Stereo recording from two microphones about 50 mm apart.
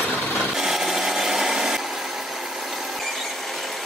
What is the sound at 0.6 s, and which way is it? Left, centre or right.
Wood, centre.